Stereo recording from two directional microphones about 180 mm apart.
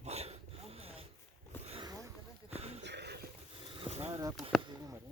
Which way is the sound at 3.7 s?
30° right (ahead or behind).